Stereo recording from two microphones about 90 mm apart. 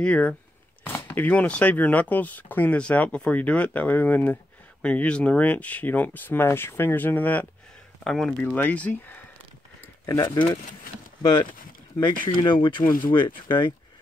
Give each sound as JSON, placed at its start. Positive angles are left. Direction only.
{"t": 0.0, "sound": "speech", "side_deg": 15}
{"t": 0.8, "sound": "speech", "side_deg": 25}
{"t": 8.0, "sound": "speech", "side_deg": 5}
{"t": 8.5, "sound": "speech", "side_deg": 20}
{"t": 10.2, "sound": "speech", "side_deg": 60}
{"t": 12.0, "sound": "speech", "side_deg": 65}